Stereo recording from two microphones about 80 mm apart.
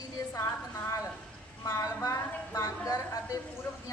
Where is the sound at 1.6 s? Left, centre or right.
Left.